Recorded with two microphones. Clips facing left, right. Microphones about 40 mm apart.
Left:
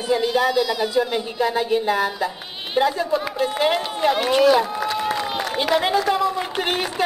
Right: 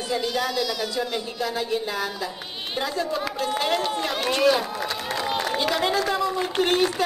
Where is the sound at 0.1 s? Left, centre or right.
Left.